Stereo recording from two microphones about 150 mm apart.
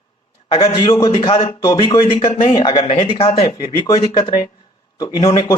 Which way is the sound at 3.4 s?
25° left (ahead or behind).